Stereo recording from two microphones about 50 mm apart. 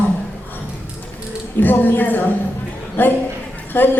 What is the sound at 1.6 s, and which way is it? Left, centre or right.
A woman's voice, left.